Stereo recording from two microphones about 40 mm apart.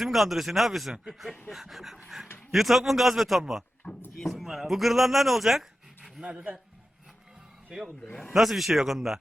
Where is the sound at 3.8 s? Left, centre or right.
Centre.